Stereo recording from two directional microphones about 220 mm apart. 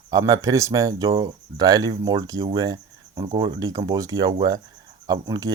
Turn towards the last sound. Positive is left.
turn(degrees=-20)  # may be behind; listen again after turning